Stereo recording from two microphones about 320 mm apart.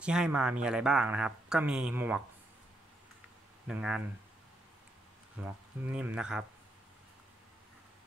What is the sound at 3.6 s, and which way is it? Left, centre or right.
Speech, centre.